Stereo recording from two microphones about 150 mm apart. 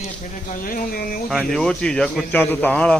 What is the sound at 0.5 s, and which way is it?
Speech, 65° left (ahead or behind).